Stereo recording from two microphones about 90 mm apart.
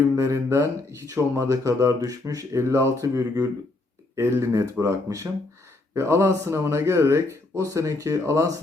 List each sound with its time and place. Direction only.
0.2 s speech: 35° right (ahead or behind)